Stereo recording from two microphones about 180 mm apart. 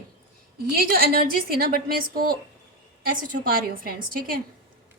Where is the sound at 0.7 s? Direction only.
55° right (ahead or behind).